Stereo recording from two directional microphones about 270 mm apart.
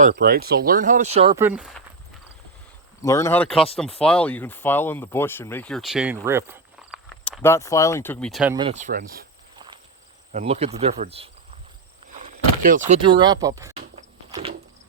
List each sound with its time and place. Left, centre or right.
0.0 s speech: right
1.4 s speech: centre
3.0 s speech: centre
7.3 s speech: centre
8.5 s speech: right
10.3 s speech: right
13.0 s speech: centre
13.7 s a sound: right